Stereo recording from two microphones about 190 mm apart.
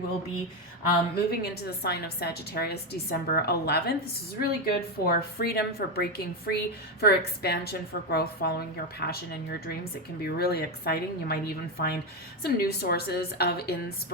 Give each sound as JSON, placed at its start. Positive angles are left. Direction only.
{"t": 1.3, "sound": "a woman's voice", "side_deg": 55}